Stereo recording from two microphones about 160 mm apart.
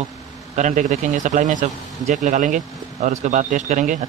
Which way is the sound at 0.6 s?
50° right (ahead or behind).